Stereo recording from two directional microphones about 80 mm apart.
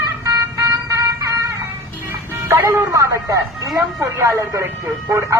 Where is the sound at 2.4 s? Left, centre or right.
Right.